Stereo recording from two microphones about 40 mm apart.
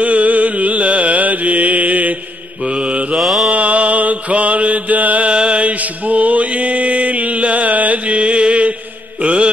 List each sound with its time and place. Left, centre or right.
0.0 s music: right
2.6 s mantra: right
3.2 s mantra: centre
3.4 s mantra: right
5.3 s mantra: right